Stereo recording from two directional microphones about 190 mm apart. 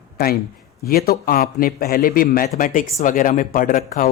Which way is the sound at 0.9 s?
50° left (ahead or behind).